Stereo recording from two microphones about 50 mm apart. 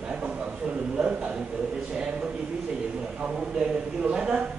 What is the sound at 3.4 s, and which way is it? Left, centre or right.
A man's voice, centre.